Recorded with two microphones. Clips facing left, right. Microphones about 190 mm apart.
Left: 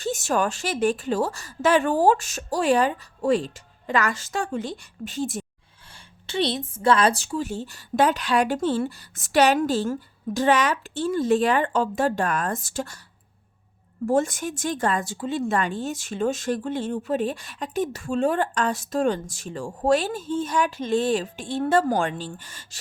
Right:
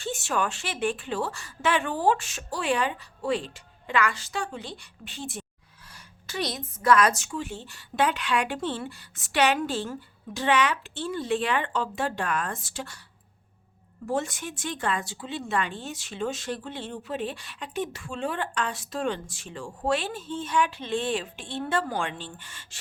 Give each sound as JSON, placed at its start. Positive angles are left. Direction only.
{"t": 0.0, "sound": "a woman's voice", "side_deg": 40}
{"t": 5.9, "sound": "a woman's voice", "side_deg": 25}
{"t": 14.1, "sound": "speech", "side_deg": 45}